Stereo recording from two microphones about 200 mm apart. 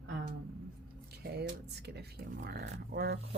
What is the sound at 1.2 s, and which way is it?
Speech, 55° right (ahead or behind).